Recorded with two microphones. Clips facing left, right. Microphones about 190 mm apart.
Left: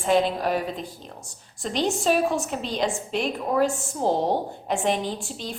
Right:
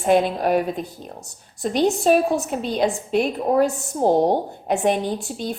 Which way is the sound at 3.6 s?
50° right (ahead or behind).